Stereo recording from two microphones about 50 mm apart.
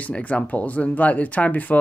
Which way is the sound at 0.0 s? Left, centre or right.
Left.